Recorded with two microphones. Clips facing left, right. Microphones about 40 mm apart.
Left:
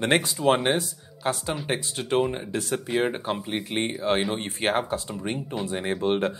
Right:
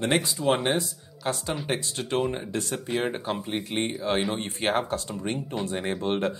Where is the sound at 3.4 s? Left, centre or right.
Left.